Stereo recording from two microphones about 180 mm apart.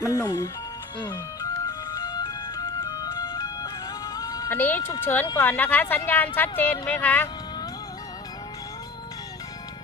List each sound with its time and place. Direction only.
0.0 s speech: 20° left (ahead or behind)
1.1 s music: 15° left (ahead or behind)